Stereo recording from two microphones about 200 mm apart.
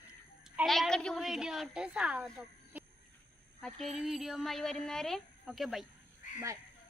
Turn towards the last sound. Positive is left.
turn(degrees=40)  # may be behind; listen again after turning